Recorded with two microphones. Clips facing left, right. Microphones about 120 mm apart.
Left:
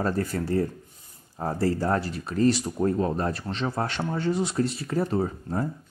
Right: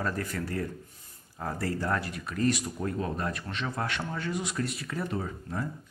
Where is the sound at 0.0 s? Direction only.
35° left (ahead or behind).